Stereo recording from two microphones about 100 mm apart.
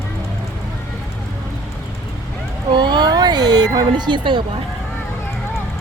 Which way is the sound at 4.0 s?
50° right (ahead or behind).